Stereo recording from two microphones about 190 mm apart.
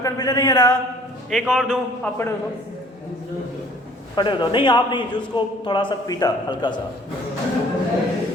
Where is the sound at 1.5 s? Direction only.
Centre (ahead or behind).